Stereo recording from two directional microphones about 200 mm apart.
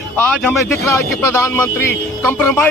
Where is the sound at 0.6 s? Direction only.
15° left (ahead or behind).